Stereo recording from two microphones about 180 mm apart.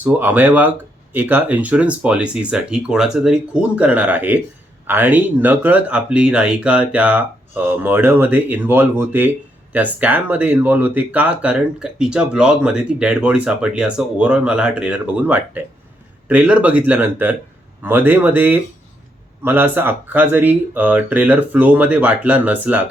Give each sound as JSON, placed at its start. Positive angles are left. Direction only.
{"t": 0.0, "sound": "speech", "side_deg": -10}